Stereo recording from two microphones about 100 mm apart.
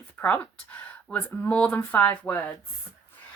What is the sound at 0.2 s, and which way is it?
Speech, 15° left (ahead or behind).